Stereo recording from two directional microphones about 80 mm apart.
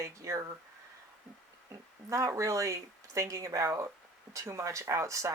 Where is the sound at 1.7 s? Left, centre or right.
Right.